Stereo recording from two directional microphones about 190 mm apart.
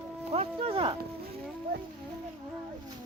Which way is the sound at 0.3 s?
30° right (ahead or behind).